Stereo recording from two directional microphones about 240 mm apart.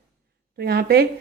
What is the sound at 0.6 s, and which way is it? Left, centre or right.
Speech, right.